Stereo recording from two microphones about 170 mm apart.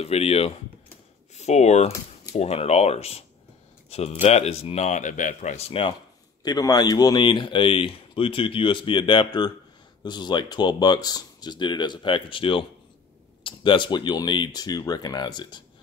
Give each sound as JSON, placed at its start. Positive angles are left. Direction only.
{"t": 0.0, "sound": "speech", "side_deg": 35}
{"t": 6.4, "sound": "a man's voice", "side_deg": 20}